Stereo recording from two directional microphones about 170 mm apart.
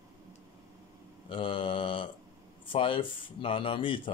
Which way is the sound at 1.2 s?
30° left (ahead or behind).